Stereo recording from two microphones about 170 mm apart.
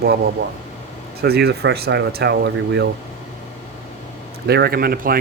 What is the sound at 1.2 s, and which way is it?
Speech, 70° right (ahead or behind).